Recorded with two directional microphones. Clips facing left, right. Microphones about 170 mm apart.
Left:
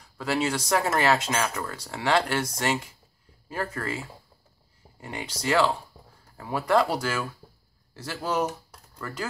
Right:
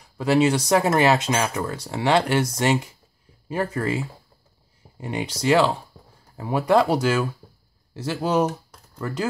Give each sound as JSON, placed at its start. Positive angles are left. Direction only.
{"t": 0.2, "sound": "speech", "side_deg": -20}
{"t": 5.0, "sound": "speech", "side_deg": -20}